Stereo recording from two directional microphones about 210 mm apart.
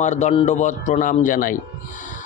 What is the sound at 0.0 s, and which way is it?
Speech, 35° left (ahead or behind).